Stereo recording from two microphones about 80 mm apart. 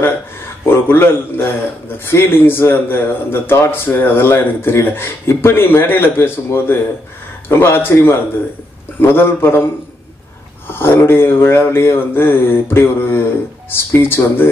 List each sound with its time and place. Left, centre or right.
0.7 s speech: left
10.7 s speech: left